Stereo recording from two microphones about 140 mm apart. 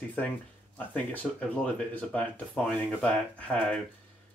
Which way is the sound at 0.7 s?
10° left (ahead or behind).